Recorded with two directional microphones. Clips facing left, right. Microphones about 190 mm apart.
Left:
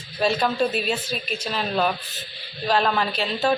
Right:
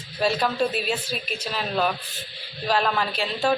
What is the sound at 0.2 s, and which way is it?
A woman's voice, 5° right (ahead or behind).